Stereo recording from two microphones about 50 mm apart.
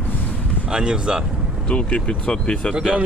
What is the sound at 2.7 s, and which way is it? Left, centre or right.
Speech, centre.